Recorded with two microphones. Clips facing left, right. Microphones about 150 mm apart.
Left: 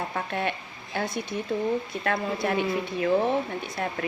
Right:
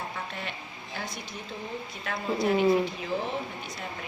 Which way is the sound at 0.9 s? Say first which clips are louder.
Left 9 dB; 60° left (ahead or behind).